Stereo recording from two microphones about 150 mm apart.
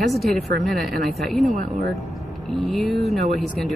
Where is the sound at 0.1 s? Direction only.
Centre (ahead or behind).